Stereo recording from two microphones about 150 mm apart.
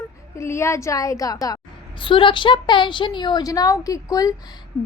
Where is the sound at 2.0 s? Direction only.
35° left (ahead or behind).